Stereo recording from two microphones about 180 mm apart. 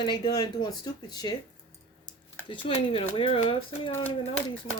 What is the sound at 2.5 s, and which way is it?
Speech, 30° left (ahead or behind).